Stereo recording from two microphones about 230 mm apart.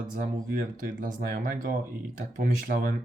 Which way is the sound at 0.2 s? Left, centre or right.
Right.